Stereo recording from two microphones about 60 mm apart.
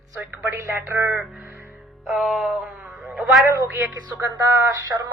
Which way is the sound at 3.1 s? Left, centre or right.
Centre.